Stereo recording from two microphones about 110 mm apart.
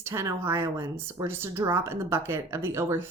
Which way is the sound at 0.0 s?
25° right (ahead or behind).